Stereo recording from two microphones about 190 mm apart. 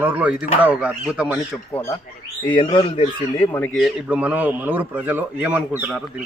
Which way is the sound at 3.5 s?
10° left (ahead or behind).